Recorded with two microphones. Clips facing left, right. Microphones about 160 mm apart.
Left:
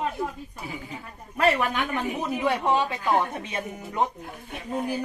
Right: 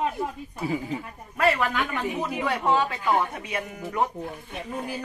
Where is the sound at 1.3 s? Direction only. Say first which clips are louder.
Even; 20° left (ahead or behind).